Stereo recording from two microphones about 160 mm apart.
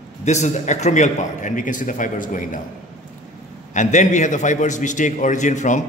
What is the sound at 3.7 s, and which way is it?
A man's voice, 50° left (ahead or behind).